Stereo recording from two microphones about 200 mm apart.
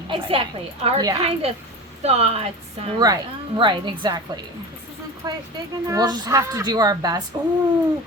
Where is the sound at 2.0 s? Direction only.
30° right (ahead or behind).